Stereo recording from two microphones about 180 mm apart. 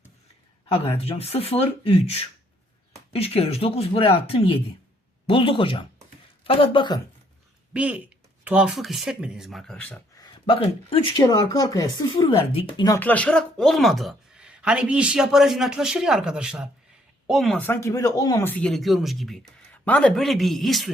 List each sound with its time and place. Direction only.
0.7 s speech: 35° left (ahead or behind)
7.7 s speech: 5° right (ahead or behind)
10.2 s speech: 25° left (ahead or behind)
11.3 s speech: 20° left (ahead or behind)
13.0 s speech: 10° left (ahead or behind)